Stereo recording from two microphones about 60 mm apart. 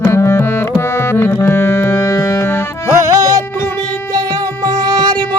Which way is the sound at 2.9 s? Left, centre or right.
Right.